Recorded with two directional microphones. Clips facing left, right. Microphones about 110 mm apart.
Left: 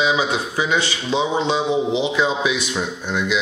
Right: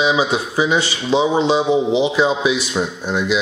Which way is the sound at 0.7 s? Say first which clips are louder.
Right 2 dB; 25° right (ahead or behind).